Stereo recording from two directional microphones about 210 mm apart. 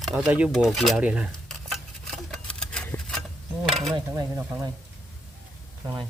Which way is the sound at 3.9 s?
15° right (ahead or behind).